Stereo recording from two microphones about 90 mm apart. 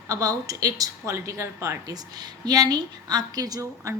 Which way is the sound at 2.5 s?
45° right (ahead or behind).